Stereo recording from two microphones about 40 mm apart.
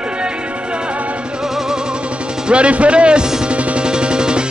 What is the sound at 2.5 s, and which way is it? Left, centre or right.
Speech, right.